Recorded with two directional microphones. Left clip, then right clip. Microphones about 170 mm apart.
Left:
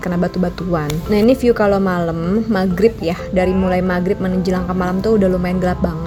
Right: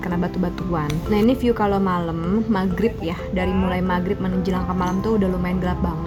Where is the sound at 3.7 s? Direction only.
20° left (ahead or behind).